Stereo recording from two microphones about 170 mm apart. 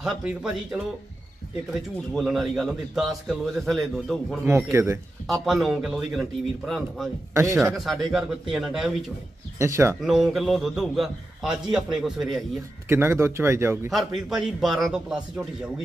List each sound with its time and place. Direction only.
0.0 s a man's voice: 5° right (ahead or behind)
4.5 s speech: 15° right (ahead or behind)
5.2 s a man's voice: centre (ahead or behind)
9.6 s speech: 15° right (ahead or behind)
10.0 s a man's voice: centre (ahead or behind)
12.8 s speech: 15° right (ahead or behind)
13.8 s a man's voice: centre (ahead or behind)